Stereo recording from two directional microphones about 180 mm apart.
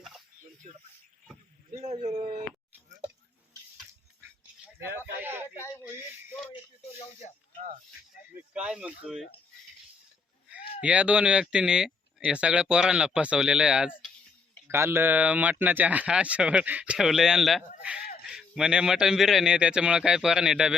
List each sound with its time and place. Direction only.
1.8 s a man's voice: 35° right (ahead or behind)
5.2 s speech: 10° right (ahead or behind)
8.5 s speech: 5° right (ahead or behind)
10.5 s speech: 5° right (ahead or behind)